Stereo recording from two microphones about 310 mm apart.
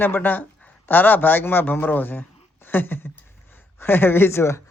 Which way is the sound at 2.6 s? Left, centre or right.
Centre.